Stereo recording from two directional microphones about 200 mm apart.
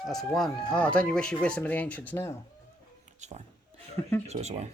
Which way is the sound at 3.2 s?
35° right (ahead or behind).